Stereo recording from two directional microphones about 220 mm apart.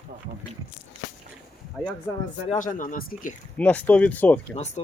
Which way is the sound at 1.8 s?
Centre (ahead or behind).